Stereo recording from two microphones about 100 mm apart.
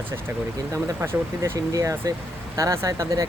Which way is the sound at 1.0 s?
25° right (ahead or behind).